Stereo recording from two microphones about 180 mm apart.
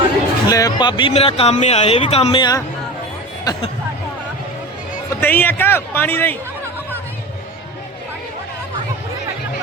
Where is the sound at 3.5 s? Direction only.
20° left (ahead or behind).